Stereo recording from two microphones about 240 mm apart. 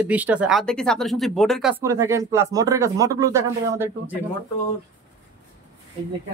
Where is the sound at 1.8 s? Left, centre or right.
Centre.